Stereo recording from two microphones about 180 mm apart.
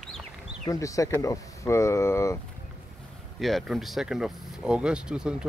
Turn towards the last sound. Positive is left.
turn(degrees=-5)  # may be behind; listen again after turning